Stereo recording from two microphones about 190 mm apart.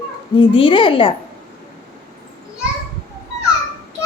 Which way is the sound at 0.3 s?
30° left (ahead or behind).